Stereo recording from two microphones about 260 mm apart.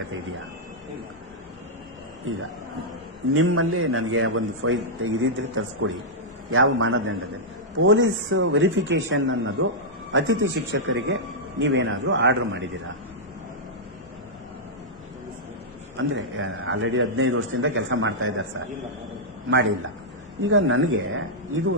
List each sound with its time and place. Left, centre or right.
3.3 s a man's voice: right
16.0 s a man's voice: right
19.5 s a man's voice: right